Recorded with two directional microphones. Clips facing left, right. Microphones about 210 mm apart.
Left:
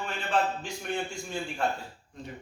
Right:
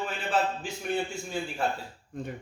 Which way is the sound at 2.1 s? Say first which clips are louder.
Right 7 dB; 50° right (ahead or behind).